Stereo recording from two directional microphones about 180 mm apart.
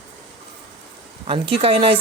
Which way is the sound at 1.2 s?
30° right (ahead or behind).